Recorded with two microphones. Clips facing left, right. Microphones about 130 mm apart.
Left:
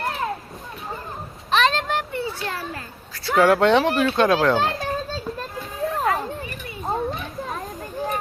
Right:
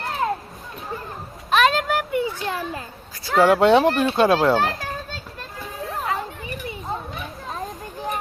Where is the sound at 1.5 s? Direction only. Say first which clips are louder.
Right 2 dB; 5° right (ahead or behind).